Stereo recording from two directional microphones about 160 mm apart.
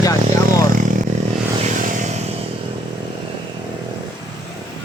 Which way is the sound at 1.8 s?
55° right (ahead or behind).